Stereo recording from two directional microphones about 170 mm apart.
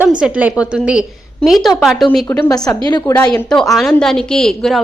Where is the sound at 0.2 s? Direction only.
5° right (ahead or behind).